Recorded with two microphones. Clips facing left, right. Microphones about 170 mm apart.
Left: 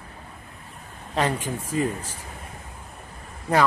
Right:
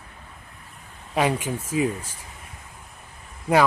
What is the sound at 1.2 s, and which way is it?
Speech, 10° right (ahead or behind).